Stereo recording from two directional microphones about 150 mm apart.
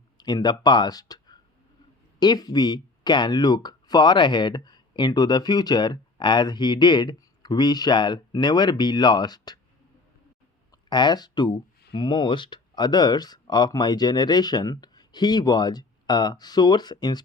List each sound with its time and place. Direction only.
0.2 s speech: 30° left (ahead or behind)
10.8 s speech: 30° left (ahead or behind)